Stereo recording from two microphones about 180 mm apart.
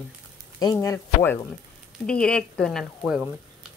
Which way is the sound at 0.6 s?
15° left (ahead or behind).